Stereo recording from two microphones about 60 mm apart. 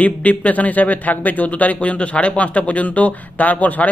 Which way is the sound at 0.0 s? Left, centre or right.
Left.